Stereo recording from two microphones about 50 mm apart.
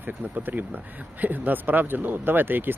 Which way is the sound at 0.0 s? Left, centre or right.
Right.